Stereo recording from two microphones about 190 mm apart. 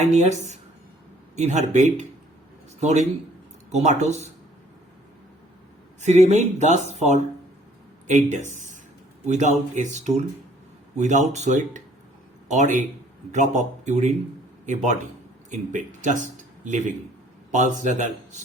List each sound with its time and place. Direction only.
0.0 s speech: 35° right (ahead or behind)
6.0 s speech: 35° right (ahead or behind)